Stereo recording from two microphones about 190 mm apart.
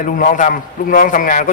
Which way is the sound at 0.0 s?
45° left (ahead or behind).